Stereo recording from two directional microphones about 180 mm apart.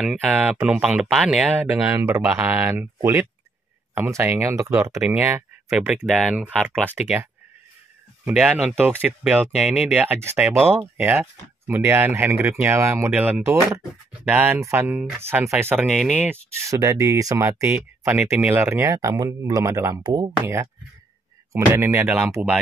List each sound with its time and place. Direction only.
0.0 s speech: 5° right (ahead or behind)
1.9 s speech: 15° right (ahead or behind); by 6.8 s 5° left (ahead or behind)
8.3 s speech: 5° right (ahead or behind)
16.5 s speech: 15° right (ahead or behind)